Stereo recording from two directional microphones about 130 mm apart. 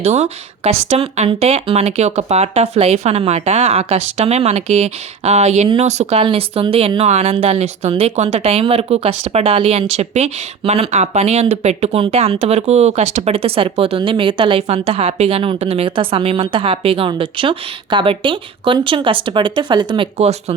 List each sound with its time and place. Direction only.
0.0 s speech: 60° right (ahead or behind)
6.2 s speech: 45° right (ahead or behind)
20.1 s speech: 55° right (ahead or behind)